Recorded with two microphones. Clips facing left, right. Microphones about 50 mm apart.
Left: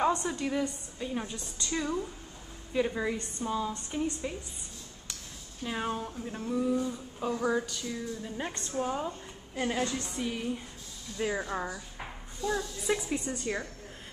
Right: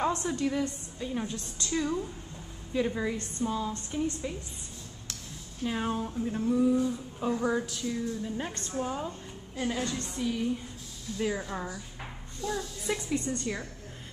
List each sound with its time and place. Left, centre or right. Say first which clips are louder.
0.0 s speech: even; centre
5.6 s speech: right 2 dB; centre
9.6 s speech: left 1 dB; centre
9.8 s speech: right 2 dB; centre